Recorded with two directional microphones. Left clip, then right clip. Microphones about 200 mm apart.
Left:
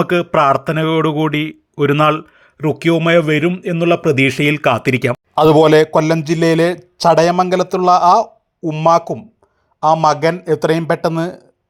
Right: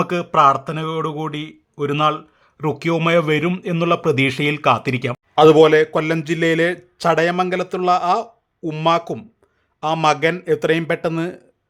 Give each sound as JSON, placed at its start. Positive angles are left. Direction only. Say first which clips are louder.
{"t": 0.0, "sound": "speech", "louder": "left 1 dB", "side_deg": 15}
{"t": 2.6, "sound": "a man's voice", "louder": "left 5 dB", "side_deg": 10}
{"t": 9.1, "sound": "speech", "louder": "left 4 dB", "side_deg": 0}
{"t": 11.2, "sound": "speech", "louder": "left 4 dB", "side_deg": -10}